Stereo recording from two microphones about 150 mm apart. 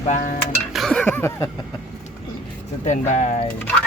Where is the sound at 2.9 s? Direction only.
55° left (ahead or behind).